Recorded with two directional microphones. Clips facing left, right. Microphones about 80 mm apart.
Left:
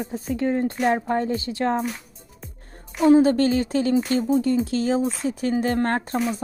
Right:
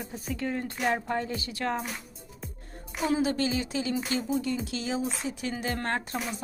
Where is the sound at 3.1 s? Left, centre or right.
Left.